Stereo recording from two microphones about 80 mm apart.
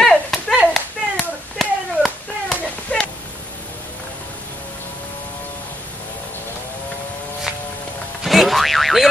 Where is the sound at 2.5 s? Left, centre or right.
Centre.